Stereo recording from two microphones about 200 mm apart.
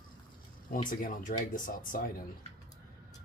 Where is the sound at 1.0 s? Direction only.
40° left (ahead or behind).